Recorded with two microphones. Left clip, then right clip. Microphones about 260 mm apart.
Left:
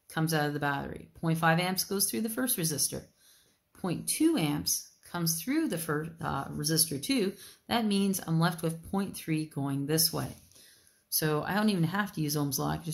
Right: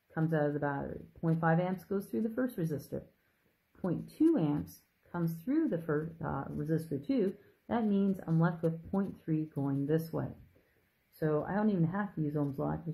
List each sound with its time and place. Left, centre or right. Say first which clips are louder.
0.1 s speech: left 2 dB; left
11.1 s speech: left 3 dB; left